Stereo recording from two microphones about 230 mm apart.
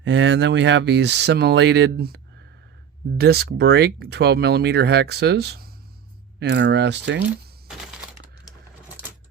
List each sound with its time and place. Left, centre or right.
0.0 s speech: right